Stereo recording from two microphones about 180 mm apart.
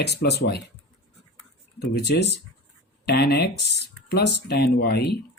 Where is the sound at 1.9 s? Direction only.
65° left (ahead or behind).